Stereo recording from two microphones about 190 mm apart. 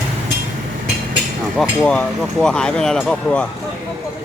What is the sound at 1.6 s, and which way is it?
Speech, 5° left (ahead or behind).